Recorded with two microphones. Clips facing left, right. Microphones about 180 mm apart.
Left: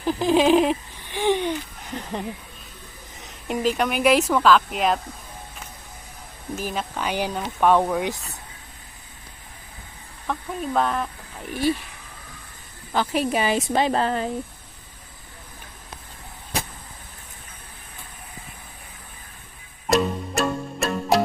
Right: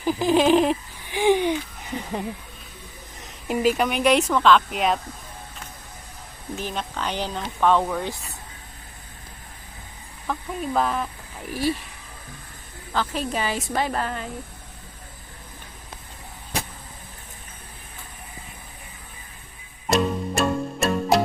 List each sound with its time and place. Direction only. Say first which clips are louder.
0.0 s a sound: even; 5° right (ahead or behind)
1.0 s a sound: right 3 dB; 10° right (ahead or behind)
3.2 s speech: right 2 dB; centre (ahead or behind)
6.6 s speech: left 1 dB; 5° left (ahead or behind)
10.2 s speech: even; centre (ahead or behind)
12.9 s speech: left 4 dB; 15° left (ahead or behind); by 14.3 s 30° left (ahead or behind)
19.9 s music: even; centre (ahead or behind)